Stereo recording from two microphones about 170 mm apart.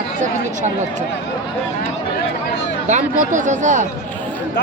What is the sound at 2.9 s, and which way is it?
A man's voice, 45° right (ahead or behind).